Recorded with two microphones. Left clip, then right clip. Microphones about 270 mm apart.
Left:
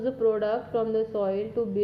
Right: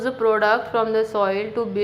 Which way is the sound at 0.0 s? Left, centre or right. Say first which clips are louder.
Right 6 dB; centre.